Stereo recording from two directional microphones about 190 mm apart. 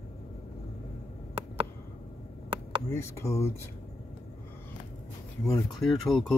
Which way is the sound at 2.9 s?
15° left (ahead or behind).